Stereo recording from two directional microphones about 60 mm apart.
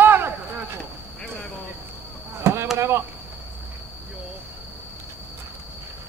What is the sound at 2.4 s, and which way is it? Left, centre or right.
Chop, right.